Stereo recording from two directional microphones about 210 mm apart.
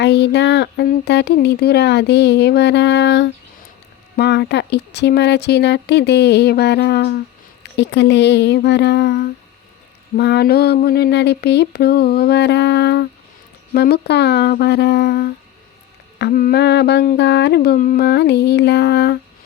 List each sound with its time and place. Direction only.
0.0 s speech: 55° left (ahead or behind)